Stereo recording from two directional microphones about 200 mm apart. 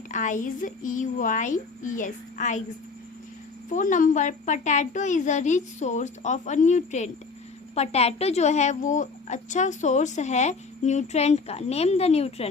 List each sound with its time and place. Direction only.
0.1 s a woman's voice: 40° left (ahead or behind)
3.7 s a woman's voice: 40° left (ahead or behind)